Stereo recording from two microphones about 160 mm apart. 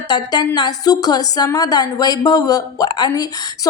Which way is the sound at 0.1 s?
25° left (ahead or behind).